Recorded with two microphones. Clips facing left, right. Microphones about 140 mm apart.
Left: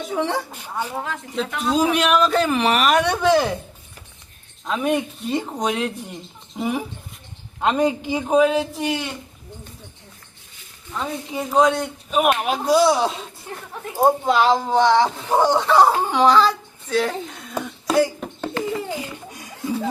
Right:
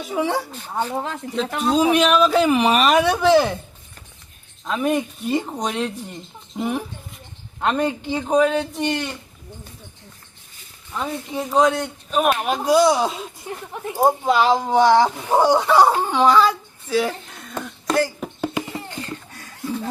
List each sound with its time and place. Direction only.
0.0 s speech: centre (ahead or behind)
1.5 s speech: 30° right (ahead or behind)
1.8 s speech: 5° right (ahead or behind)
4.6 s speech: centre (ahead or behind)
7.6 s speech: 15° left (ahead or behind)
10.9 s speech: centre (ahead or behind)
13.5 s speech: 15° right (ahead or behind)
13.9 s speech: centre (ahead or behind)
14.5 s speech: 10° right (ahead or behind)
18.3 s a sound: 10° right (ahead or behind)
18.9 s a sound: 10° left (ahead or behind)